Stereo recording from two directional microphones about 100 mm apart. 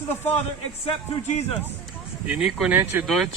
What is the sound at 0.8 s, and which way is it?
Speech, 90° left.